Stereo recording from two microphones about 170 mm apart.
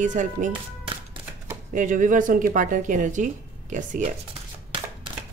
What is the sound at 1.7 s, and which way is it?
Speech, 50° right (ahead or behind).